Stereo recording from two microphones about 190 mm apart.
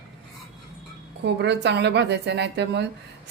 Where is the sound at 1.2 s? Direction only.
65° right (ahead or behind).